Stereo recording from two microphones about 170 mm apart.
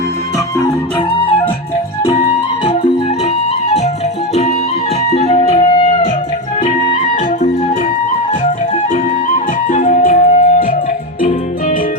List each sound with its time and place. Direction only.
0.3 s music: 20° left (ahead or behind)
2.0 s music: 35° left (ahead or behind)
5.0 s music: 35° left (ahead or behind); by 10.8 s 55° left (ahead or behind)